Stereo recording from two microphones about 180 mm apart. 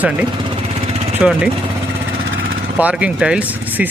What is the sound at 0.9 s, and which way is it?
Vehicle, 35° right (ahead or behind).